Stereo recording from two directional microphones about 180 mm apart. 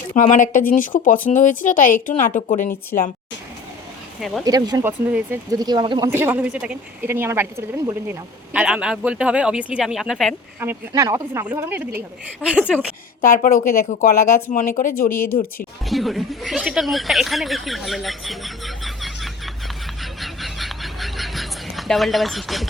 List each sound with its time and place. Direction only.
0.1 s speech: 45° left (ahead or behind)
4.4 s speech: 20° right (ahead or behind)
4.9 s speech: 10° right (ahead or behind)
6.1 s speech: 10° right (ahead or behind)
10.6 s speech: 15° right (ahead or behind)
13.2 s speech: 50° left (ahead or behind)
15.9 s a sound: centre (ahead or behind)